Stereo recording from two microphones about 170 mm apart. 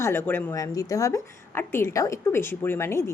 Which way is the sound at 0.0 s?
15° left (ahead or behind).